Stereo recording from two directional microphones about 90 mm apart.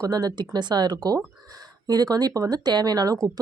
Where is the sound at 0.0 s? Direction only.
45° right (ahead or behind).